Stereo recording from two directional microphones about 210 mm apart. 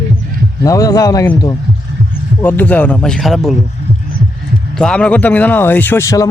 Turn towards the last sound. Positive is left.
turn(degrees=15)  # may be behind; listen again after turning